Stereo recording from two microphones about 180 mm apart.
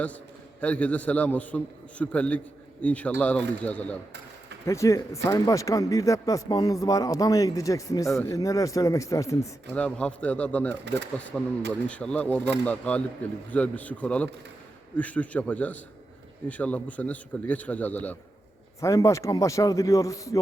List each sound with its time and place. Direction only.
0.6 s a man's voice: 5° left (ahead or behind)
10.8 s speech: 75° right (ahead or behind)
11.9 s a man's voice: 5° left (ahead or behind)